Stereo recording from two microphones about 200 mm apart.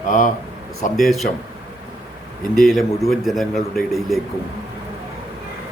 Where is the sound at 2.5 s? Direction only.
Centre (ahead or behind).